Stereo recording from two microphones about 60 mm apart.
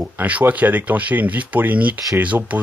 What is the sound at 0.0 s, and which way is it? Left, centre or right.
Speech, right.